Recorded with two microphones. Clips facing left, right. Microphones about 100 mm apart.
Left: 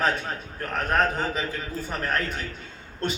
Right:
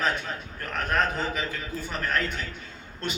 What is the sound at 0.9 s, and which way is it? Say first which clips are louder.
A man's voice: left 2 dB; 30° left (ahead or behind).